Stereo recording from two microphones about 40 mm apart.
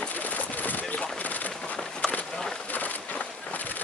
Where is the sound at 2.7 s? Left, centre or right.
Left.